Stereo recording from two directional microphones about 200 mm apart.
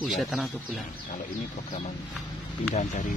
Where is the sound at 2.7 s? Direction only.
35° left (ahead or behind).